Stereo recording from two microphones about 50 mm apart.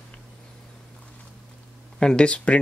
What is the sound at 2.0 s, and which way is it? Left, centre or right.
Speech, centre.